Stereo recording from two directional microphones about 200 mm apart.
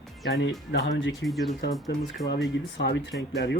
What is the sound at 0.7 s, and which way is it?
Speech, 65° left (ahead or behind).